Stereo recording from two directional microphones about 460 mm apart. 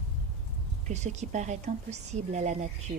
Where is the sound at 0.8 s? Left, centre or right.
Centre.